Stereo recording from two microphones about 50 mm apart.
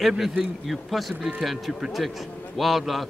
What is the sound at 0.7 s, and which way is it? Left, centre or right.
A man's voice, centre.